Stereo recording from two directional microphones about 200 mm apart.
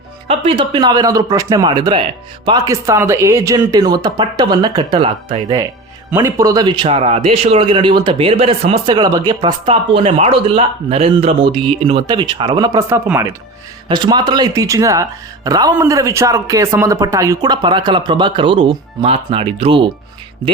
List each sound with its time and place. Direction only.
0.3 s a man's voice: 25° right (ahead or behind)
6.1 s a man's voice: 15° right (ahead or behind)